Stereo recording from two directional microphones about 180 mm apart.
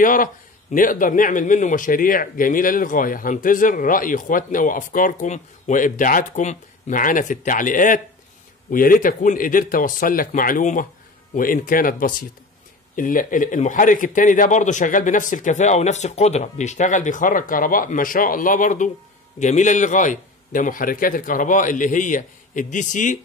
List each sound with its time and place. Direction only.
0.0 s a man's voice: 50° left (ahead or behind)